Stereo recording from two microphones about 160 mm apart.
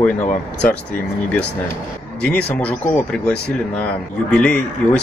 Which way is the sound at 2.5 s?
10° left (ahead or behind).